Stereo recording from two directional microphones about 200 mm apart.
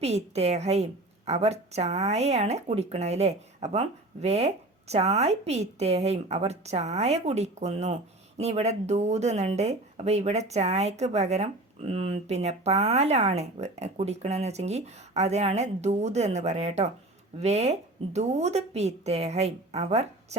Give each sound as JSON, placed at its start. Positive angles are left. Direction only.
{"t": 0.0, "sound": "speech", "side_deg": -30}